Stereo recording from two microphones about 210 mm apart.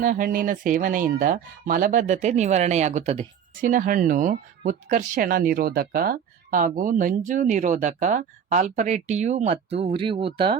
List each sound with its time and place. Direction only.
0.0 s speech: 40° right (ahead or behind); by 10.6 s 25° right (ahead or behind)